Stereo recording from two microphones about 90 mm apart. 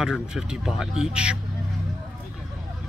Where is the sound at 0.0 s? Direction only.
5° right (ahead or behind).